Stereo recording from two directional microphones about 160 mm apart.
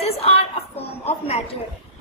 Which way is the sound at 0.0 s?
40° left (ahead or behind).